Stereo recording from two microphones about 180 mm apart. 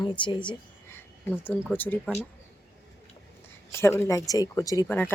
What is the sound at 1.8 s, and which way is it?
Speech, 10° left (ahead or behind).